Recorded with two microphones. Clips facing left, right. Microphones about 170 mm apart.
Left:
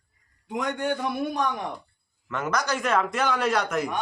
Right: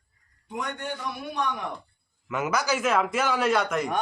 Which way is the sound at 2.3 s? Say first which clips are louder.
Right 1 dB; 10° right (ahead or behind).